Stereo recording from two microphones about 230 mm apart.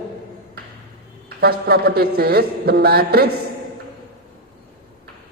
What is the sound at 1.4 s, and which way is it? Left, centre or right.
A man's voice, right.